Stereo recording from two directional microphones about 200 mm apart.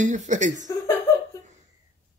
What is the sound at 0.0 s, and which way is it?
Speech, 40° right (ahead or behind).